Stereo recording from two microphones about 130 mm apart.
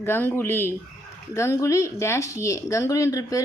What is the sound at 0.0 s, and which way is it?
A woman's voice, 15° left (ahead or behind).